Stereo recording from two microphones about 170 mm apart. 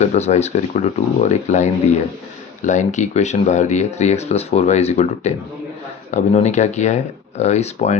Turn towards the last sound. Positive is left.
turn(degrees=40)  # may be behind; listen again after turning